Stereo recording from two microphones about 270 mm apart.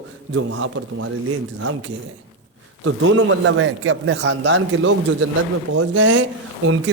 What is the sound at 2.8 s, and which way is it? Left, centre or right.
Speech, right.